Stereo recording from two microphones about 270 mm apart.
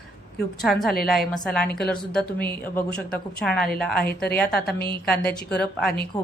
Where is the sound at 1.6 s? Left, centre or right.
Left.